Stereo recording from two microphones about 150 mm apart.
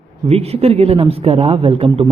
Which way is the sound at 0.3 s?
45° right (ahead or behind).